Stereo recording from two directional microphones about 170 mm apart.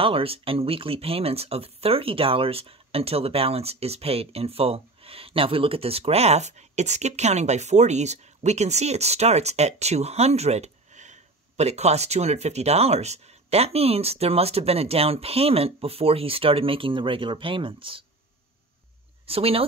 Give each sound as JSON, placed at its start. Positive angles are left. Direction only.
{"t": 0.0, "sound": "speech", "side_deg": -35}
{"t": 19.2, "sound": "speech", "side_deg": -35}